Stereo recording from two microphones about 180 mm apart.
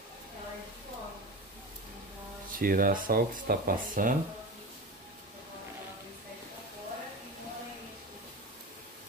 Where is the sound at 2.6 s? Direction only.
50° right (ahead or behind).